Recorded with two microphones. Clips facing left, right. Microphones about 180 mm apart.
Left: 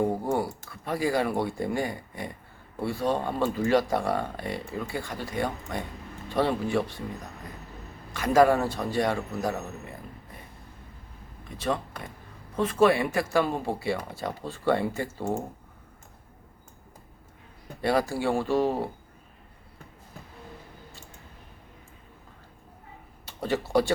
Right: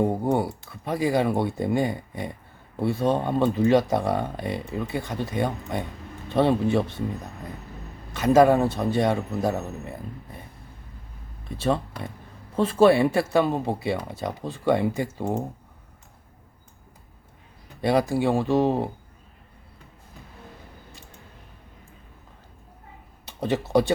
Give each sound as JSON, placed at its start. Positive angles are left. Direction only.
{"t": 0.0, "sound": "speech", "side_deg": -20}
{"t": 8.1, "sound": "speech", "side_deg": -20}
{"t": 11.5, "sound": "speech", "side_deg": -30}
{"t": 17.8, "sound": "speech", "side_deg": -20}
{"t": 23.2, "sound": "speech", "side_deg": -20}